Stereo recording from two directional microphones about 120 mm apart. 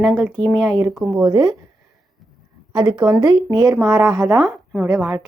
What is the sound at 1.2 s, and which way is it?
Speech, 35° right (ahead or behind).